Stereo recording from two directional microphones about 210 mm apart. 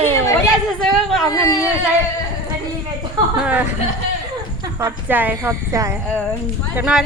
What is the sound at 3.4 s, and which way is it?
Speech, 5° right (ahead or behind).